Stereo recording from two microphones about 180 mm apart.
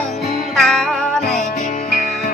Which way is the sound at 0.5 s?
5° left (ahead or behind).